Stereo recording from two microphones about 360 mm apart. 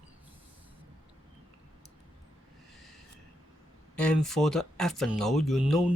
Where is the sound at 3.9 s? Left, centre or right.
Centre.